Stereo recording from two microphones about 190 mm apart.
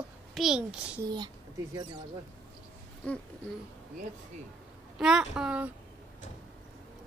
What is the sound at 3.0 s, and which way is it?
Speech, 5° left (ahead or behind).